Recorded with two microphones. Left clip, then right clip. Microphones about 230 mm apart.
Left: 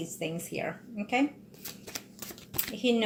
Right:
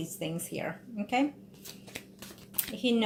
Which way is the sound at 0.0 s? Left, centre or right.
Right.